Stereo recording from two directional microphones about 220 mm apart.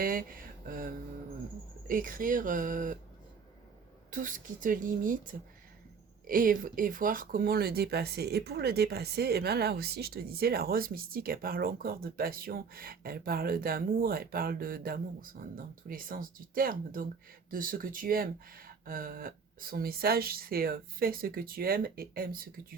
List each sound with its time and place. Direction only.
0.0 s a sound: 40° right (ahead or behind)
1.9 s speech: 40° right (ahead or behind)
4.1 s speech: 35° right (ahead or behind)
6.2 s speech: 40° right (ahead or behind)